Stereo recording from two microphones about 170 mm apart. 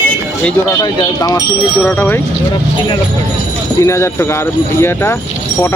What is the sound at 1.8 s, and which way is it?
Speech, 10° left (ahead or behind).